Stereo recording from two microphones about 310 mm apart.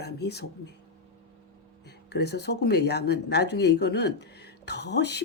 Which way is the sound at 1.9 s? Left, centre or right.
Left.